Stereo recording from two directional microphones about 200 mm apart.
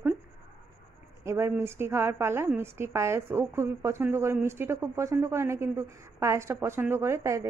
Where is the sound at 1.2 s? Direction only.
15° right (ahead or behind).